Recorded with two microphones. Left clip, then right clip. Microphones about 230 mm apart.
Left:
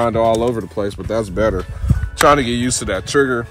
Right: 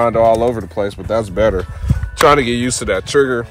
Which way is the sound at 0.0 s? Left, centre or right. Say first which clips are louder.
Right 3 dB; centre.